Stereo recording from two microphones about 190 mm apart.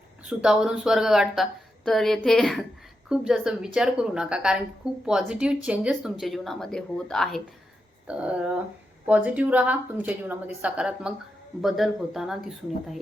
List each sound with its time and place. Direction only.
0.3 s a woman's voice: 5° right (ahead or behind)